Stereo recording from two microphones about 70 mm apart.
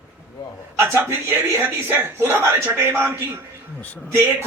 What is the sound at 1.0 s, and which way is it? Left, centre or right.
A man's voice, right.